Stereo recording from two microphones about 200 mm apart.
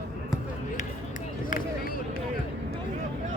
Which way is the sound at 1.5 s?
45° left (ahead or behind).